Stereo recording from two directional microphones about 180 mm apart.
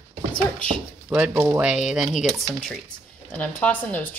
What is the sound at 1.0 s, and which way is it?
Speech, 10° right (ahead or behind).